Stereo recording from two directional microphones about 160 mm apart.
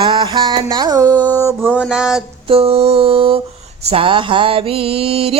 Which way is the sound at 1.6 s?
Centre (ahead or behind).